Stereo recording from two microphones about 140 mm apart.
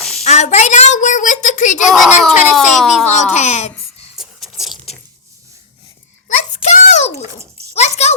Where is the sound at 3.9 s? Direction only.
50° left (ahead or behind).